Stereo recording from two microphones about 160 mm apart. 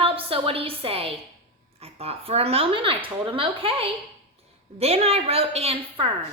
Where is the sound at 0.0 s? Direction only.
35° right (ahead or behind).